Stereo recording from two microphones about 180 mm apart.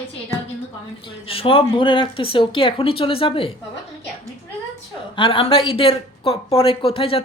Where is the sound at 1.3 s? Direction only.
30° left (ahead or behind).